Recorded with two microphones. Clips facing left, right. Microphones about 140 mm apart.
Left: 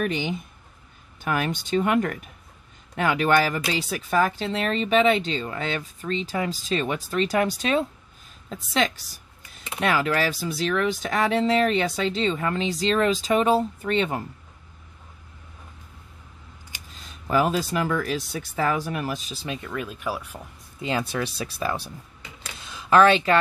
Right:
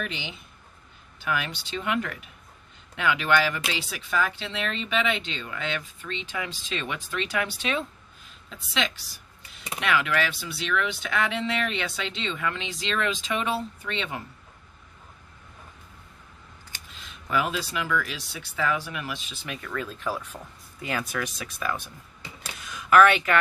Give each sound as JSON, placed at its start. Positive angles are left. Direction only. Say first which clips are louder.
{"t": 0.0, "sound": "speech", "louder": "left 9 dB", "side_deg": 45}
{"t": 16.9, "sound": "speech", "louder": "left 4 dB", "side_deg": 40}
{"t": 20.8, "sound": "speech", "louder": "left 4 dB", "side_deg": 25}
{"t": 22.6, "sound": "a sound", "louder": "left 1 dB", "side_deg": 30}